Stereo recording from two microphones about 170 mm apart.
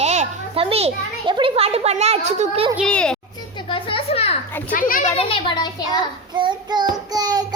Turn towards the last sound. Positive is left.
turn(degrees=-25)  # may be behind; listen again after turning